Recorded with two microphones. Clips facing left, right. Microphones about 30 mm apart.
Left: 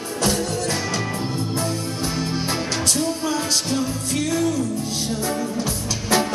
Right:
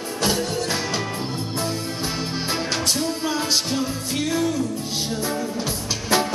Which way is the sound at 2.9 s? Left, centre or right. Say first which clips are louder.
Left 1 dB; centre.